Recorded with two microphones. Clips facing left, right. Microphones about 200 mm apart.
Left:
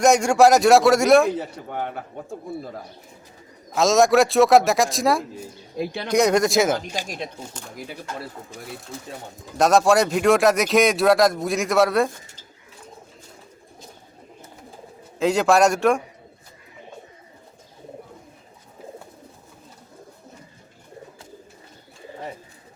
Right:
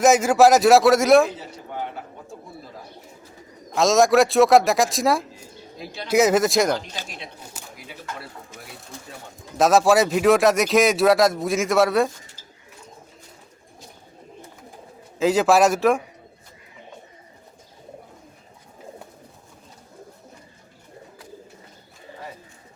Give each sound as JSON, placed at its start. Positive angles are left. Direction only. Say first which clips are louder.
{"t": 0.0, "sound": "speech", "louder": "even", "side_deg": 0}
{"t": 1.4, "sound": "a man's voice", "louder": "left 3 dB", "side_deg": 55}
{"t": 3.7, "sound": "speech", "louder": "even", "side_deg": 0}
{"t": 5.7, "sound": "speech", "louder": "left 8 dB", "side_deg": 60}
{"t": 6.1, "sound": "speech", "louder": "right 1 dB", "side_deg": -5}
{"t": 6.8, "sound": "speech", "louder": "left 6 dB", "side_deg": 15}
{"t": 9.6, "sound": "speech", "louder": "even", "side_deg": 0}
{"t": 15.2, "sound": "speech", "louder": "even", "side_deg": 0}